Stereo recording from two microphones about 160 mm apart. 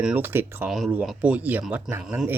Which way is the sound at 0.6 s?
Centre (ahead or behind).